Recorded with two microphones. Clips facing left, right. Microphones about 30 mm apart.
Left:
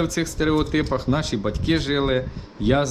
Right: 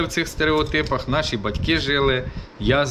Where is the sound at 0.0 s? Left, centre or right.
Right.